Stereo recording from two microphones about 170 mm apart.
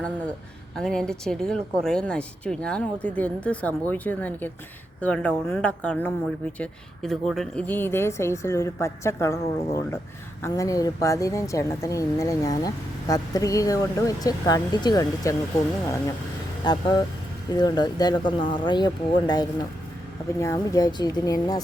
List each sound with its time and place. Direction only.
0.8 s a woman's voice: 5° left (ahead or behind); by 15.4 s 20° left (ahead or behind)
16.6 s speech: 25° left (ahead or behind)